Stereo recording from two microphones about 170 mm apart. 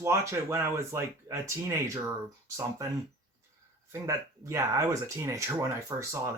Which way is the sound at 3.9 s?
15° right (ahead or behind).